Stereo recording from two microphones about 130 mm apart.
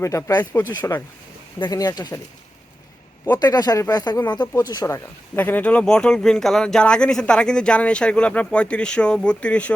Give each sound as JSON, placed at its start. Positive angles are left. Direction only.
{"t": 0.0, "sound": "speech", "side_deg": 20}
{"t": 3.3, "sound": "speech", "side_deg": 30}
{"t": 5.4, "sound": "speech", "side_deg": 15}